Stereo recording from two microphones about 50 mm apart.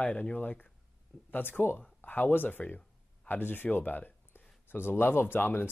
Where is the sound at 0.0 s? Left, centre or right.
Left.